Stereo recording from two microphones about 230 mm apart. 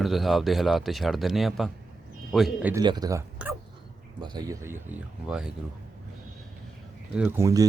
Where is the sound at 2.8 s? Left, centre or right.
Centre.